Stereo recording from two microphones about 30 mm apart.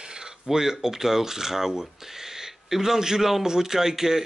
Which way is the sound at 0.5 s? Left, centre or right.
Centre.